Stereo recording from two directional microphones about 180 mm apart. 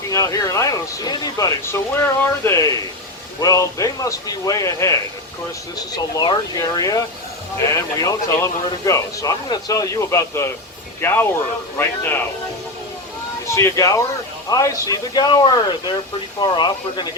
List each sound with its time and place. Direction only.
0.1 s a man's voice: 20° left (ahead or behind)
13.5 s a man's voice: 15° left (ahead or behind)